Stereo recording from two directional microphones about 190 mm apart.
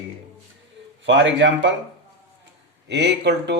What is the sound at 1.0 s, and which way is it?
Speech, 75° right (ahead or behind).